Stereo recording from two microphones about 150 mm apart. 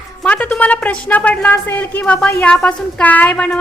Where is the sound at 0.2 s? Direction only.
10° left (ahead or behind).